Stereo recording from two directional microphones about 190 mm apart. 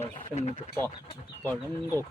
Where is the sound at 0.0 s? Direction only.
35° left (ahead or behind).